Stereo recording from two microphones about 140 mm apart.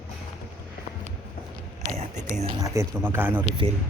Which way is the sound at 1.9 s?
50° right (ahead or behind).